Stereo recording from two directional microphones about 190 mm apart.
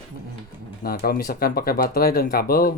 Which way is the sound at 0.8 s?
50° left (ahead or behind).